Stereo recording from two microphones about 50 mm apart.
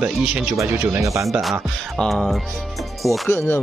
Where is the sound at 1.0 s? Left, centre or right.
Right.